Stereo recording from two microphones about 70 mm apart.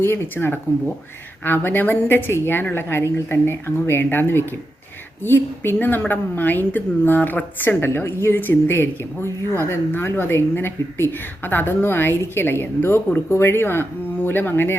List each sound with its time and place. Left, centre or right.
0.0 s a woman's voice: left